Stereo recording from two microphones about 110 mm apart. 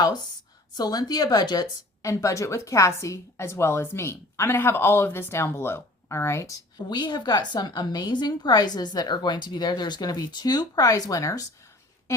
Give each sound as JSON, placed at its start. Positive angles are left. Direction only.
{"t": 0.0, "sound": "a woman's voice", "side_deg": 40}
{"t": 6.8, "sound": "a woman's voice", "side_deg": 40}